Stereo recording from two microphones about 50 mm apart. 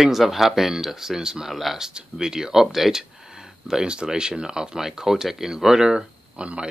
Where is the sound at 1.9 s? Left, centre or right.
Centre.